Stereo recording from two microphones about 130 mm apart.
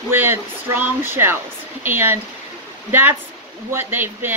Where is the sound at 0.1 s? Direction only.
15° right (ahead or behind).